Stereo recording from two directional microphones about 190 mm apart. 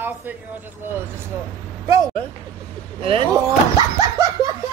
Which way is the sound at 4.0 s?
15° right (ahead or behind).